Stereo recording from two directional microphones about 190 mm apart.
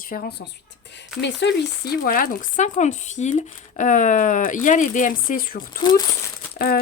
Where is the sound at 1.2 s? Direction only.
65° left (ahead or behind).